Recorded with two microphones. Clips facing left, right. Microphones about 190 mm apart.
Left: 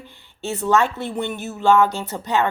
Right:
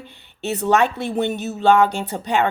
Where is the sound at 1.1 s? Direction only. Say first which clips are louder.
Right 4 dB; 20° right (ahead or behind).